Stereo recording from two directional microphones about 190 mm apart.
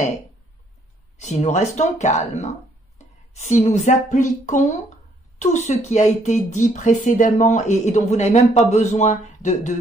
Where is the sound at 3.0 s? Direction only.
40° left (ahead or behind).